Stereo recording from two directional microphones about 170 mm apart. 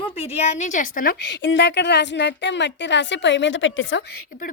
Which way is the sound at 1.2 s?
90° left.